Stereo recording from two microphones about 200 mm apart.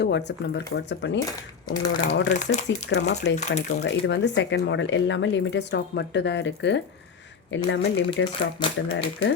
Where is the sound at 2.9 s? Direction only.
60° left (ahead or behind).